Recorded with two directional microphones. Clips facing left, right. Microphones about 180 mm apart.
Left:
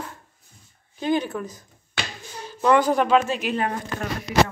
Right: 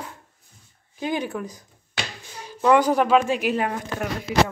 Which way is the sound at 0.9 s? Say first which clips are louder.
Left 3 dB; 10° right (ahead or behind).